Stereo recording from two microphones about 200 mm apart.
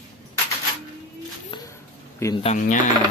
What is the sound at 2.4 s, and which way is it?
Speech, 35° left (ahead or behind).